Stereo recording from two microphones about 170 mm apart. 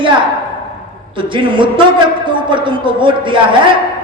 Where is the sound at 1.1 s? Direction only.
30° right (ahead or behind).